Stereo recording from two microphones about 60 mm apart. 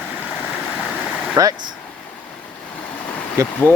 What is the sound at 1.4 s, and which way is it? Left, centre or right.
Speech, right.